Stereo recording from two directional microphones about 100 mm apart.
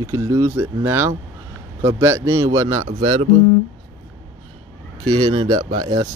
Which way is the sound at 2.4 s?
35° right (ahead or behind).